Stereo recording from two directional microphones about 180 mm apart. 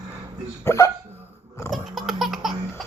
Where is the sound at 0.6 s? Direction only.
15° left (ahead or behind).